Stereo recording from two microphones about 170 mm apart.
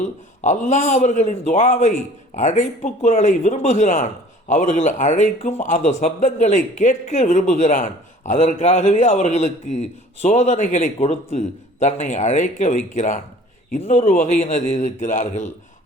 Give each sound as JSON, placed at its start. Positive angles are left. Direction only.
{"t": 0.0, "sound": "speech", "side_deg": 45}